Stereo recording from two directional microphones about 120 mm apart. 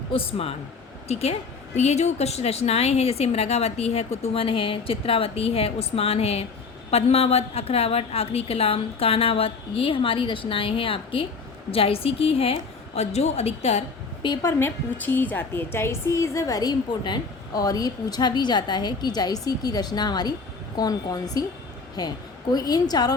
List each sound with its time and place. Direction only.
0.1 s a woman's voice: 50° left (ahead or behind)
14.4 s a woman's voice: 15° left (ahead or behind); by 23.1 s 35° left (ahead or behind)